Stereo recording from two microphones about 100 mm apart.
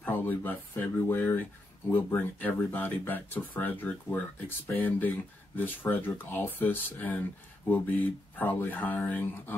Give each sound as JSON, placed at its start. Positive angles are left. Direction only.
{"t": 0.0, "sound": "speech", "side_deg": 20}